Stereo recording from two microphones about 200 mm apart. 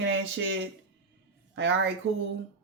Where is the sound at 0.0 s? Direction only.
65° right (ahead or behind).